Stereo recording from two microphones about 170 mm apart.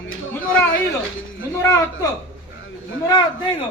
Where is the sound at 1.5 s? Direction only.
15° left (ahead or behind).